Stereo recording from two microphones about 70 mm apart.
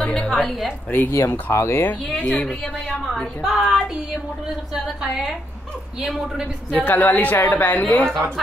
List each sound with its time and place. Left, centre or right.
0.1 s a woman's voice: centre
1.1 s speech: left
2.1 s a woman's voice: centre
3.4 s a sound: centre
5.9 s a man's voice: centre
6.7 s a woman's voice: left